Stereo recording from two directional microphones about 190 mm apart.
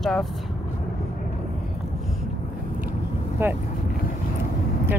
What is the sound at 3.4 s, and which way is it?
Speech, 10° right (ahead or behind).